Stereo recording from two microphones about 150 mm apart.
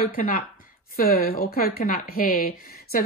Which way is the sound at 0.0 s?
70° left (ahead or behind).